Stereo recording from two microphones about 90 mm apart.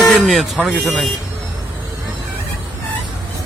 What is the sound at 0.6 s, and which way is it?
Speech, centre (ahead or behind).